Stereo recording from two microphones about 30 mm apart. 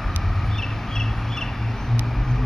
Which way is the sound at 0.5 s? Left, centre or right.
Centre.